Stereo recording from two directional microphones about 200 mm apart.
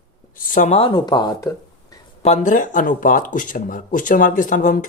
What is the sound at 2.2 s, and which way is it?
Speech, 35° left (ahead or behind).